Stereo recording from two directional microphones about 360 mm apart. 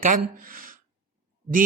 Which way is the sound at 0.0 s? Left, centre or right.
Right.